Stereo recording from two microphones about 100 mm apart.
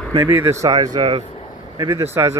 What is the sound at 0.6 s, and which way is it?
Speech, 40° right (ahead or behind).